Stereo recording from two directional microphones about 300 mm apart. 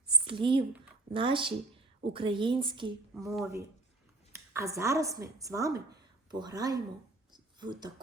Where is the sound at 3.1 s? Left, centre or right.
Centre.